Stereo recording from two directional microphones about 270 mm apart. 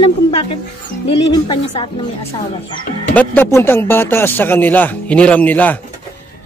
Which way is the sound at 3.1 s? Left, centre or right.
Centre.